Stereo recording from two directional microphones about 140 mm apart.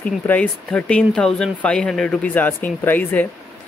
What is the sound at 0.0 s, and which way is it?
Speech, 10° left (ahead or behind).